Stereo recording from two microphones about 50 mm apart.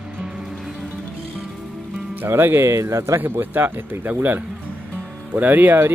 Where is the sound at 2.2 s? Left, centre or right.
Right.